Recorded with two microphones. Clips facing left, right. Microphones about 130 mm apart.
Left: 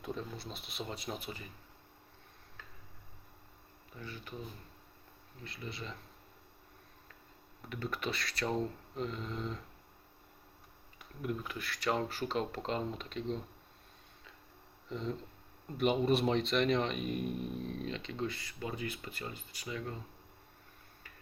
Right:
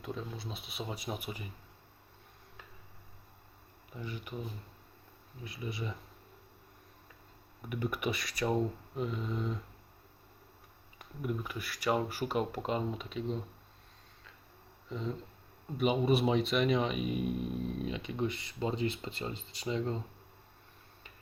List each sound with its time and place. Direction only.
0.0 s speech: centre (ahead or behind)
3.9 s speech: 15° right (ahead or behind)
5.4 s speech: 15° right (ahead or behind)
7.7 s speech: 15° right (ahead or behind)
11.2 s speech: 5° right (ahead or behind)
14.8 s speech: 5° right (ahead or behind); by 20.0 s 25° right (ahead or behind)